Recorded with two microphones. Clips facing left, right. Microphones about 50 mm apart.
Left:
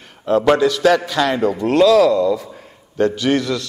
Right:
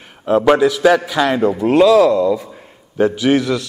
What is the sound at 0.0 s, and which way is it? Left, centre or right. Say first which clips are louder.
A man's voice: right 2 dB; centre.